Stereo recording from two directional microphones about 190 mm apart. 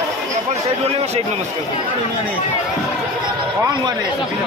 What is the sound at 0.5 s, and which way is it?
Speech, 35° right (ahead or behind).